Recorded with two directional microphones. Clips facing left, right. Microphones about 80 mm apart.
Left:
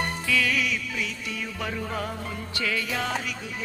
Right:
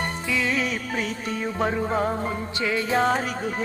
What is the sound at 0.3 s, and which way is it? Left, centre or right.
Music, right.